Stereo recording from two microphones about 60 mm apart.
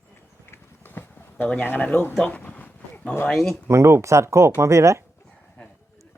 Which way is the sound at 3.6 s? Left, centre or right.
Right.